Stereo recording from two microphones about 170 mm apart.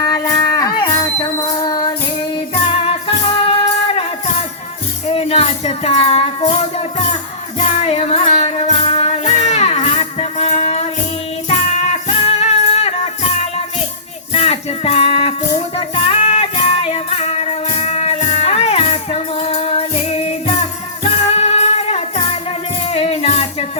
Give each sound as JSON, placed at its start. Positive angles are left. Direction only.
{"t": 0.0, "sound": "a sound", "side_deg": 20}
{"t": 2.8, "sound": "music", "side_deg": 35}
{"t": 5.0, "sound": "music", "side_deg": 35}
{"t": 7.9, "sound": "music", "side_deg": 40}
{"t": 14.3, "sound": "music", "side_deg": 40}